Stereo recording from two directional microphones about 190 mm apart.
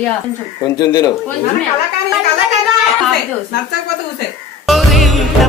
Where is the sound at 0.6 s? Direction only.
20° left (ahead or behind).